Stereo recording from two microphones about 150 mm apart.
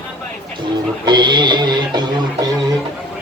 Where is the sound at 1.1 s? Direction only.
30° right (ahead or behind).